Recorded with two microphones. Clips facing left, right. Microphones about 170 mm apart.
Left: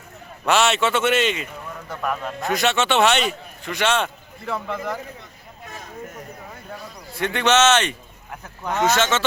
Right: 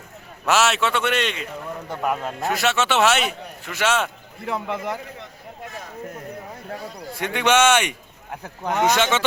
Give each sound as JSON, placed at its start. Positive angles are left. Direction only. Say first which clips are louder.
{"t": 0.4, "sound": "a man's voice", "louder": "left 1 dB", "side_deg": -5}
{"t": 1.9, "sound": "speech", "louder": "right 1 dB", "side_deg": -20}
{"t": 2.4, "sound": "a man's voice", "louder": "left 2 dB", "side_deg": 0}
{"t": 4.5, "sound": "speech", "louder": "even", "side_deg": -20}
{"t": 7.2, "sound": "speech", "louder": "even", "side_deg": -10}